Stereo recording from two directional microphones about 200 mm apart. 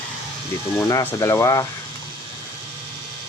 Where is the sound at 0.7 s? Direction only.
15° left (ahead or behind).